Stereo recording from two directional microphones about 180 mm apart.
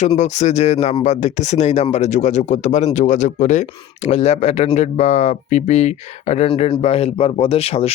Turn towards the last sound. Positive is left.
turn(degrees=35)  # may be behind; listen again after turning